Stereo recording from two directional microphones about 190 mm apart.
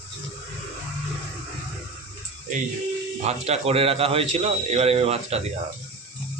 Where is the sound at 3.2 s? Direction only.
35° right (ahead or behind).